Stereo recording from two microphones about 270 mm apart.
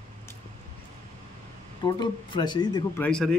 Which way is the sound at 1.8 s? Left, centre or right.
Centre.